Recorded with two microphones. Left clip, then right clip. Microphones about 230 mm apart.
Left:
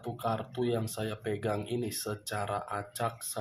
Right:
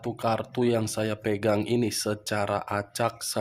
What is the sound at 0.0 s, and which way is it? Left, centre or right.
Speech, right.